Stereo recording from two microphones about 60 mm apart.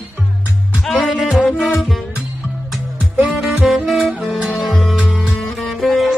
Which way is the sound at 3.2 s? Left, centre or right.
Centre.